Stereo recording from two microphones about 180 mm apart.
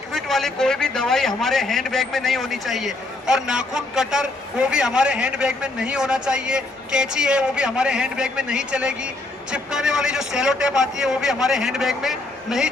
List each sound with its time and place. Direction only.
0.1 s a man's voice: centre (ahead or behind)